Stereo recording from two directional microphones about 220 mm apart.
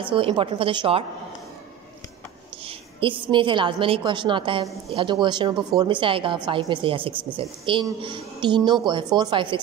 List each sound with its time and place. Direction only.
0.0 s a woman's voice: 25° right (ahead or behind)
2.6 s a woman's voice: 25° right (ahead or behind)